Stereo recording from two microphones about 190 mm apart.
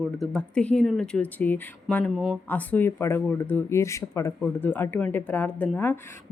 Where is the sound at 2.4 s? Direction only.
10° left (ahead or behind).